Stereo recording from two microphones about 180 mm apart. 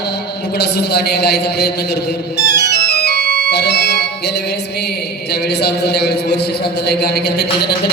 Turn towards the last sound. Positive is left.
turn(degrees=65)  # may be behind; listen again after turning